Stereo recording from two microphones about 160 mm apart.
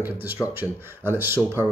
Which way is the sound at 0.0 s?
10° right (ahead or behind).